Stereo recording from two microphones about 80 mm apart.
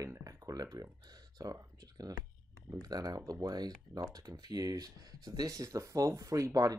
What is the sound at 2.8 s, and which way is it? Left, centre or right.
Speech, right.